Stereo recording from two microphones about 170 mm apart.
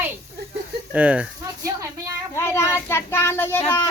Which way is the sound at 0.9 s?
10° right (ahead or behind).